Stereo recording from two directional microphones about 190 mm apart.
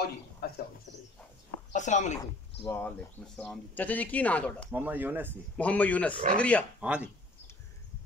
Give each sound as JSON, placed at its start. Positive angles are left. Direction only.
{"t": 0.4, "sound": "speech", "side_deg": 55}
{"t": 1.7, "sound": "speech", "side_deg": 40}
{"t": 2.6, "sound": "speech", "side_deg": 10}
{"t": 4.7, "sound": "speech", "side_deg": -10}
{"t": 5.6, "sound": "speech", "side_deg": 5}
{"t": 6.8, "sound": "speech", "side_deg": -5}